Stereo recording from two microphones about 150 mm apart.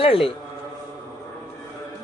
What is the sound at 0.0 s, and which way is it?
Speech, 40° left (ahead or behind).